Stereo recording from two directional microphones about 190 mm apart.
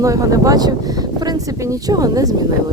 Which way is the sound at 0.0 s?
15° right (ahead or behind).